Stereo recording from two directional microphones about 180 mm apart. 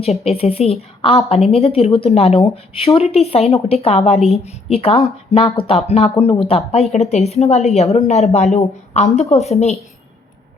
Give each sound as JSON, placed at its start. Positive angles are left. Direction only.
{"t": 0.0, "sound": "a woman's voice", "side_deg": 35}